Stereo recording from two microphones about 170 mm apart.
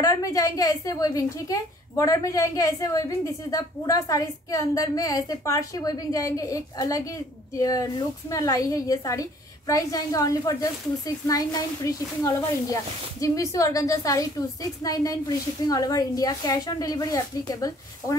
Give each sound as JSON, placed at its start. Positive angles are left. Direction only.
{"t": 0.0, "sound": "a woman's voice", "side_deg": 20}